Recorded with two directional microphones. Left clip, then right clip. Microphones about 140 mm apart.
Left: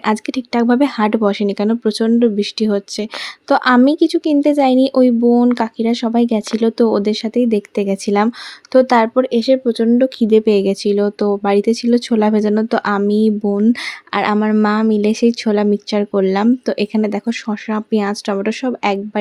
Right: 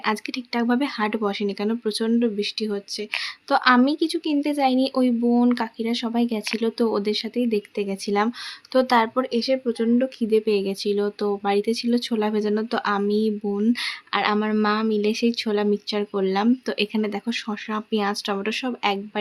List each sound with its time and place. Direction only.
0.0 s speech: 55° left (ahead or behind)